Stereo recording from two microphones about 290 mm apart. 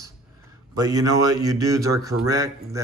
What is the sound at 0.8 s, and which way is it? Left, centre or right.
Speech, centre.